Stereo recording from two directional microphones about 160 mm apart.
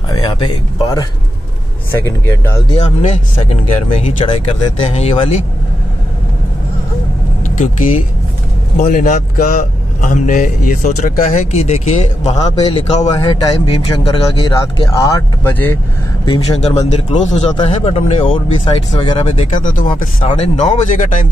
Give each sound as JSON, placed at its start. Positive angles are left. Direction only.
{"t": 0.1, "sound": "speech", "side_deg": 30}
{"t": 1.9, "sound": "speech", "side_deg": 15}
{"t": 2.7, "sound": "speech", "side_deg": 45}
{"t": 4.3, "sound": "speech", "side_deg": 40}
{"t": 7.5, "sound": "speech", "side_deg": 50}
{"t": 11.5, "sound": "speech", "side_deg": 40}
{"t": 13.1, "sound": "speech", "side_deg": 30}
{"t": 16.5, "sound": "speech", "side_deg": 40}
{"t": 19.6, "sound": "speech", "side_deg": 55}
{"t": 20.2, "sound": "speech", "side_deg": 40}